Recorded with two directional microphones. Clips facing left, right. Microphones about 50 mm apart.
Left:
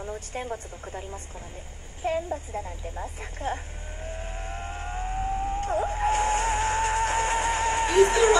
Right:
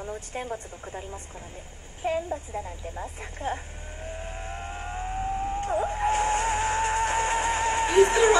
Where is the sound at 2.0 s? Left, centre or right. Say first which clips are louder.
Even; centre.